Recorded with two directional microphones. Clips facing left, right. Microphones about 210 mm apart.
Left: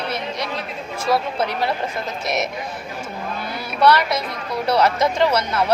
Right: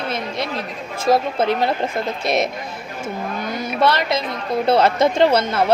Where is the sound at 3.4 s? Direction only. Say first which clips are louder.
Right 4 dB; 20° right (ahead or behind).